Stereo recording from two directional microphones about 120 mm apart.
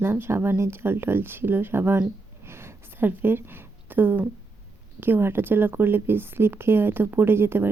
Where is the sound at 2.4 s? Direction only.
20° right (ahead or behind).